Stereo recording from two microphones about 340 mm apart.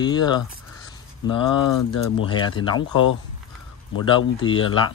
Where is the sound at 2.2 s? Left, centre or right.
Centre.